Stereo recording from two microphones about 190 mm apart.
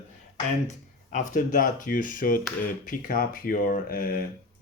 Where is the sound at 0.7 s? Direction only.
40° left (ahead or behind).